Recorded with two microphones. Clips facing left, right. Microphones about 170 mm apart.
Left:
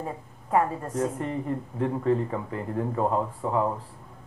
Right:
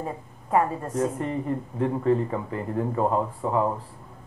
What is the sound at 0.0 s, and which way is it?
Speech, 20° right (ahead or behind).